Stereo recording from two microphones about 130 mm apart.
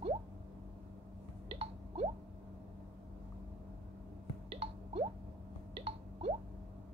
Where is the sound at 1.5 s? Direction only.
55° right (ahead or behind).